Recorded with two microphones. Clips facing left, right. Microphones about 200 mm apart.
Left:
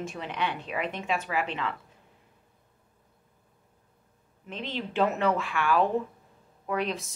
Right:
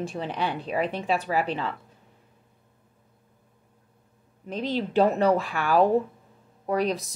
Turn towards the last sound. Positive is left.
turn(degrees=-40)  # may be behind; listen again after turning